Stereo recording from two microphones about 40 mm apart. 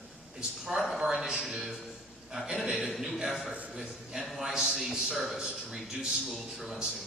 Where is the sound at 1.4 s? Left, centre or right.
Centre.